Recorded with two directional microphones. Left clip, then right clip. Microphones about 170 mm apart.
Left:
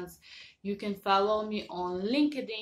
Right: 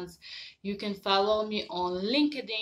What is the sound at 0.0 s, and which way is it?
Speech, 20° right (ahead or behind).